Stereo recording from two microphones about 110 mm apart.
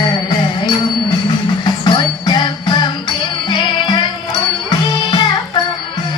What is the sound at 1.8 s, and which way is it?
Music, 45° left (ahead or behind).